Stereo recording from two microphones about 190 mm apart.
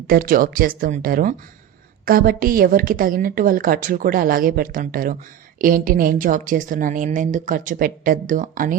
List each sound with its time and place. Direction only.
0.1 s a woman's voice: 50° right (ahead or behind)